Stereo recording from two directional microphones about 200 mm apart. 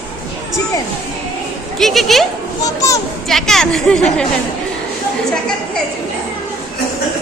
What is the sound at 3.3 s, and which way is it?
Speech, centre (ahead or behind).